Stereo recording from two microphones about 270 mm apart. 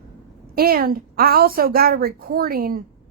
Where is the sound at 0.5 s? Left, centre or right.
Right.